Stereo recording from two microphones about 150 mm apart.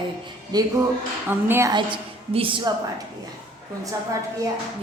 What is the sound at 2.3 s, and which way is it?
Speech, 35° right (ahead or behind).